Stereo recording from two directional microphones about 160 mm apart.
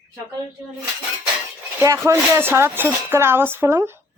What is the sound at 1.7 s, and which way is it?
Speech, 15° right (ahead or behind).